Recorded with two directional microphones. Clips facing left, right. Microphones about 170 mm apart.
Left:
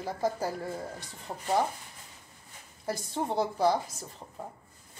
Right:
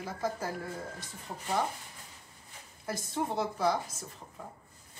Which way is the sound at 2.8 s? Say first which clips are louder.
Left 2 dB; 30° left (ahead or behind).